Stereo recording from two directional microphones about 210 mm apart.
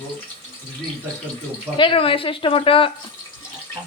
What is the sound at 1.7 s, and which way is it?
Speech, 25° left (ahead or behind).